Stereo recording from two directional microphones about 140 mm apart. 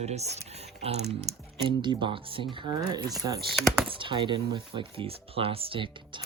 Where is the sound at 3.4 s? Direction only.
Centre (ahead or behind).